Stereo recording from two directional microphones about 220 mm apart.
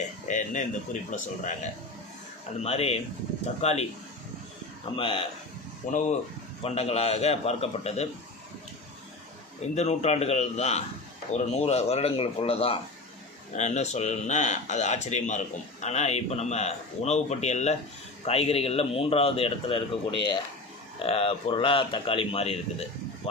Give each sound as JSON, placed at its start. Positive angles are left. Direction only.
{"t": 0.3, "sound": "speech", "side_deg": 35}
{"t": 2.6, "sound": "a man's voice", "side_deg": 25}
{"t": 4.9, "sound": "a man's voice", "side_deg": 25}
{"t": 5.8, "sound": "a man's voice", "side_deg": 35}
{"t": 9.7, "sound": "a man's voice", "side_deg": 30}